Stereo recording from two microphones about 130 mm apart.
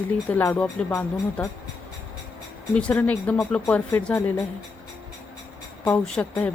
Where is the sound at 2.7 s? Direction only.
10° left (ahead or behind).